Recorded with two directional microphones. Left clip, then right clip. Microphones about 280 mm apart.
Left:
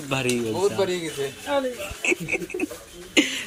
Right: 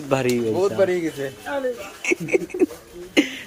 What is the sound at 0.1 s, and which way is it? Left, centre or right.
Speech, centre.